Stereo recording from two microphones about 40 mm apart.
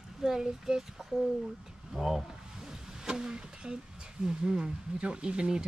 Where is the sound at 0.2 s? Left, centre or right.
Centre.